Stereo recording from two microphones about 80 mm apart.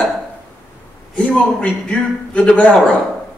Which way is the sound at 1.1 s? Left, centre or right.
Centre.